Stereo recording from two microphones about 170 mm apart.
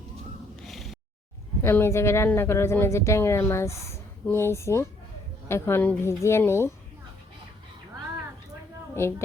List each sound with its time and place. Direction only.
0.7 s a sound: centre (ahead or behind)
1.6 s a woman's voice: 15° left (ahead or behind)
9.0 s a woman's voice: 15° left (ahead or behind)